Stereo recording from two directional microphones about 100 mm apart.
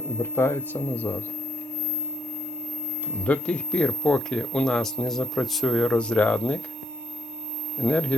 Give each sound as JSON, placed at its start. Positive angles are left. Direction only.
{"t": 0.2, "sound": "speech", "side_deg": 25}
{"t": 3.2, "sound": "speech", "side_deg": 15}
{"t": 7.8, "sound": "speech", "side_deg": 10}